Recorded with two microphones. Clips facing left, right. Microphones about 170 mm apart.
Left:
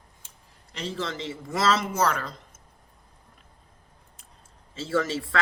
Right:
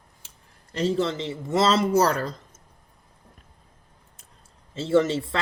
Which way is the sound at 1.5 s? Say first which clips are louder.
Right 4 dB; 25° right (ahead or behind).